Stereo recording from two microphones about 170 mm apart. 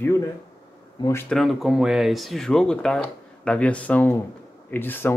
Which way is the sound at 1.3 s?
Centre (ahead or behind).